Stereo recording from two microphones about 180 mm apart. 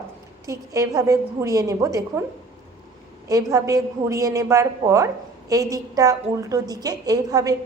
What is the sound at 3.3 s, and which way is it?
A woman's voice, 20° right (ahead or behind).